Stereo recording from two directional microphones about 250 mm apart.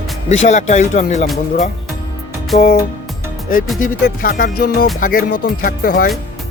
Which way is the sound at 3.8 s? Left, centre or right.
Left.